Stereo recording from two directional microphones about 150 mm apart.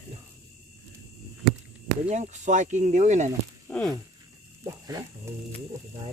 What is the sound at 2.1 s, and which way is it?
Speech, 50° right (ahead or behind).